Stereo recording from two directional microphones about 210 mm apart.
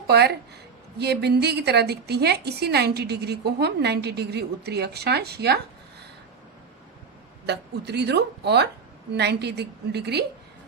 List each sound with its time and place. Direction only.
0.1 s a woman's voice: 50° right (ahead or behind)
7.4 s a woman's voice: 50° right (ahead or behind)